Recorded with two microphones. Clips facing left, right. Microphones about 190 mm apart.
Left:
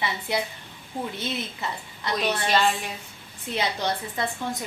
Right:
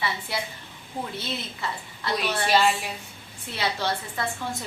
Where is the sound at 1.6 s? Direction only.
20° left (ahead or behind).